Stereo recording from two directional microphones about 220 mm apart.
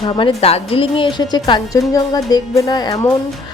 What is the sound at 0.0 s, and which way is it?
A woman's voice, 25° left (ahead or behind).